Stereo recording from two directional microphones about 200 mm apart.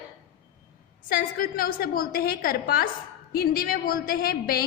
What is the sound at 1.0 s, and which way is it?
A woman's voice, 45° left (ahead or behind).